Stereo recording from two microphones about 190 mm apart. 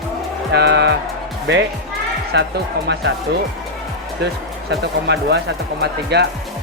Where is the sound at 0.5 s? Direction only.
65° right (ahead or behind).